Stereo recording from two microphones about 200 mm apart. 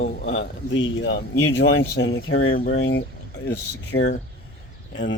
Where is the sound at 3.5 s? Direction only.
60° left (ahead or behind).